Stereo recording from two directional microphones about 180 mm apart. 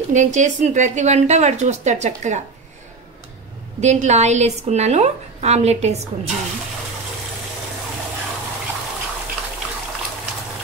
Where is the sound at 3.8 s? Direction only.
40° right (ahead or behind).